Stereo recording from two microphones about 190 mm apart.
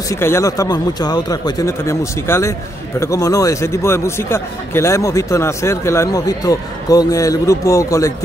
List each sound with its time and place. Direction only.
0.1 s a man's voice: 15° left (ahead or behind)